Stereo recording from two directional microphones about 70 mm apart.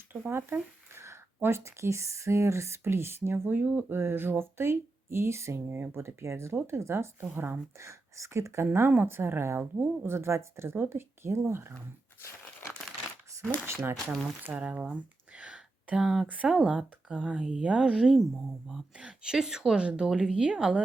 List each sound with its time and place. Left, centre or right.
0.3 s speech: right
7.8 s speech: right
10.2 s speech: right
13.3 s speech: right
14.5 s speech: centre
15.4 s a sound: centre
16.2 s speech: centre